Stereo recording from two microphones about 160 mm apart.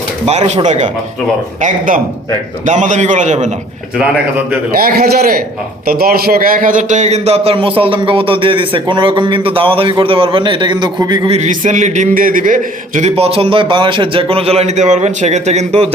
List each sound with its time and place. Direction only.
0.3 s a man's voice: 45° right (ahead or behind)
2.6 s a man's voice: 50° right (ahead or behind)
4.7 s a man's voice: 70° right (ahead or behind); by 11.3 s 30° right (ahead or behind)
11.3 s a man's voice: 50° right (ahead or behind)